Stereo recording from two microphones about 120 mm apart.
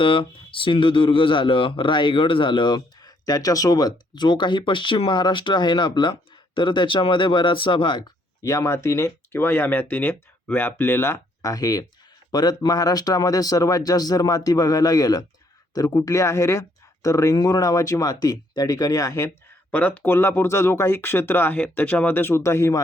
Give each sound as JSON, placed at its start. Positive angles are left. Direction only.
{"t": 0.0, "sound": "speech", "side_deg": 45}
{"t": 8.4, "sound": "speech", "side_deg": 25}
{"t": 19.7, "sound": "speech", "side_deg": 15}